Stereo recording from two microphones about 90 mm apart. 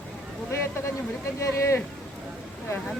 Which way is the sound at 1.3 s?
35° left (ahead or behind).